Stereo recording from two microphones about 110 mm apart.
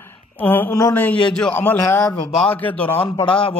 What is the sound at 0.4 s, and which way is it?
A man's voice, 15° left (ahead or behind).